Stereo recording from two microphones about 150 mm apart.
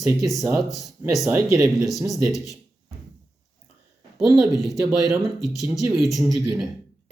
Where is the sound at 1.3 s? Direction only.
20° right (ahead or behind).